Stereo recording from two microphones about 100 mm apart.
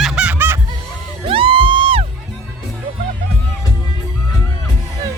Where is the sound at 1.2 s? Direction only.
65° right (ahead or behind).